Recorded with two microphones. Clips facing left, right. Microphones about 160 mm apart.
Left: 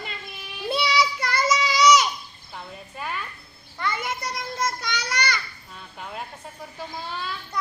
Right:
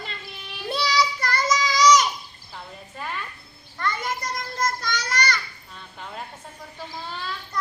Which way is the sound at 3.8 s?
10° left (ahead or behind).